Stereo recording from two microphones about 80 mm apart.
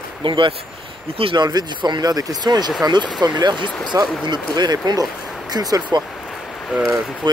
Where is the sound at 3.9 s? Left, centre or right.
Right.